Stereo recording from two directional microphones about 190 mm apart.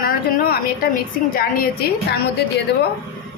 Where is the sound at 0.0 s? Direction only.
50° left (ahead or behind).